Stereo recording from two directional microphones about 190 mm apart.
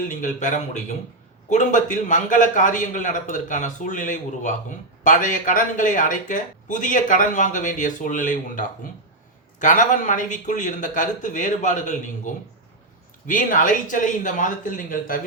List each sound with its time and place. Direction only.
0.1 s a man's voice: 40° left (ahead or behind)